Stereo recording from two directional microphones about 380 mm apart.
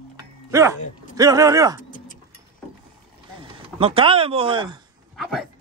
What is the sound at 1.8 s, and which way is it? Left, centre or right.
Tick-tock, left.